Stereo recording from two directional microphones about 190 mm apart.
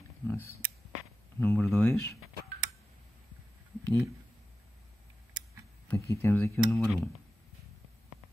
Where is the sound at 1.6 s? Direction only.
Centre (ahead or behind).